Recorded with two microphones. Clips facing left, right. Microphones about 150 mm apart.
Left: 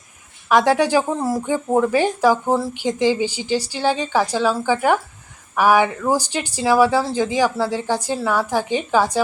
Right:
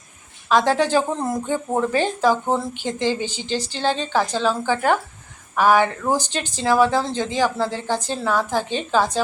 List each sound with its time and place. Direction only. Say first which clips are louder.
0.4 s speech: left 2 dB; 10° left (ahead or behind)